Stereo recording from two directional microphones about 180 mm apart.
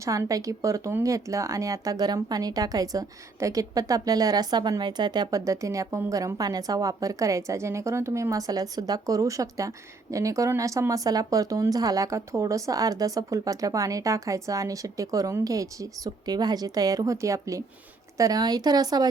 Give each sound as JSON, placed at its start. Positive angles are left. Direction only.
{"t": 0.0, "sound": "speech", "side_deg": -20}